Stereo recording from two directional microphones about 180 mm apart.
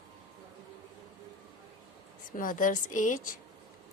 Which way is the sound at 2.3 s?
50° left (ahead or behind).